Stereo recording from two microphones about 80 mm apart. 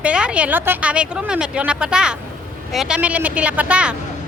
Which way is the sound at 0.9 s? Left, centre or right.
Centre.